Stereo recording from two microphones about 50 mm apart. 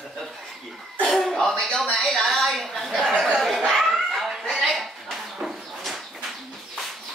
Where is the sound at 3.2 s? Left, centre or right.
Centre.